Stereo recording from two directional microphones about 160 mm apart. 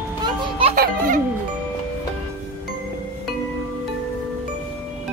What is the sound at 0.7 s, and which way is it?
Music, 65° right (ahead or behind).